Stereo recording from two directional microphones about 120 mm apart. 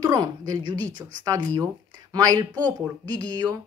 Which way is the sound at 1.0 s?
10° right (ahead or behind).